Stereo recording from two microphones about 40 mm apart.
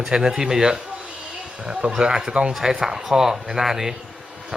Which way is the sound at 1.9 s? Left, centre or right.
Centre.